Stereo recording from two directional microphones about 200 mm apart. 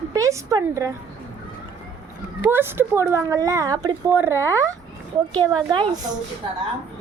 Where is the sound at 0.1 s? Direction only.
15° right (ahead or behind).